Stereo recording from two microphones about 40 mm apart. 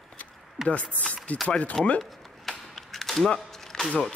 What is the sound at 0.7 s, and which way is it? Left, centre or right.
Speech, left.